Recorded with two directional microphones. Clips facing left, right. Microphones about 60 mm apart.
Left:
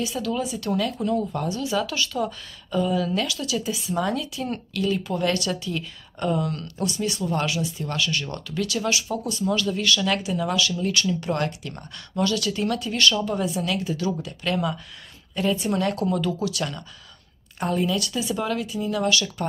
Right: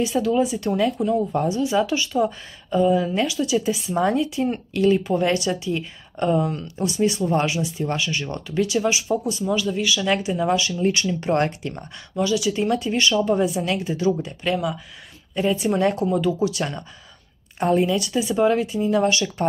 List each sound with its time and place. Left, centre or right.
0.0 s speech: right
12.2 s speech: centre
14.5 s speech: centre
15.3 s speech: right